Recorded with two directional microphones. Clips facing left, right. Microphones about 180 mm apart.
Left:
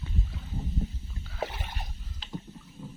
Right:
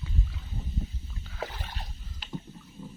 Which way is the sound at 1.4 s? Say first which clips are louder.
Left 3 dB; 20° left (ahead or behind).